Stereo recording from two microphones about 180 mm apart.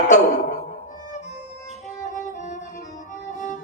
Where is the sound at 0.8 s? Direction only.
45° left (ahead or behind).